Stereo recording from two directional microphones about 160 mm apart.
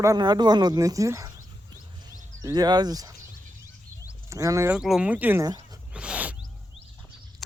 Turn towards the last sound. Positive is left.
turn(degrees=-5)  # may be behind; listen again after turning